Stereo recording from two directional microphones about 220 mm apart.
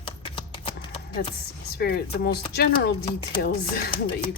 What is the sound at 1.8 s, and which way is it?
Speech, 45° left (ahead or behind).